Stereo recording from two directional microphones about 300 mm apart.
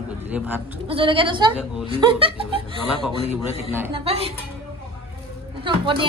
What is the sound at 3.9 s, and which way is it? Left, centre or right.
Speech, centre.